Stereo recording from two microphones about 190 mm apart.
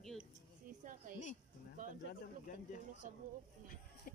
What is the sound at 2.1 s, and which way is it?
Speech, 45° left (ahead or behind).